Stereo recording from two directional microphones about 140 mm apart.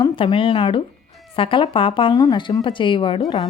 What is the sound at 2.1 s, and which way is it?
Speech, 25° left (ahead or behind).